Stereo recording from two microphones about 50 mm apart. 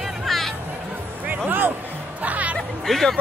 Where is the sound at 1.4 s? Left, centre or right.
Right.